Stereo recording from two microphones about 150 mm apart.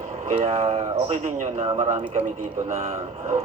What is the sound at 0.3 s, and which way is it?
A man's voice, 45° right (ahead or behind).